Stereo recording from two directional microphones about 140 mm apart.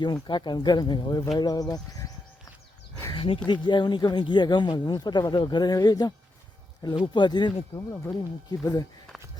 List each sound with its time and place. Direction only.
0.0 s speech: 30° left (ahead or behind)
3.1 s speech: 40° left (ahead or behind)